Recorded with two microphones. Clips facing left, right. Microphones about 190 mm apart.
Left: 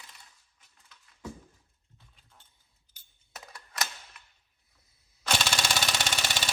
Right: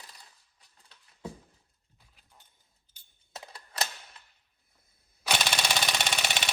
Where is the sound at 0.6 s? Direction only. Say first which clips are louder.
Left 1 dB; 30° right (ahead or behind).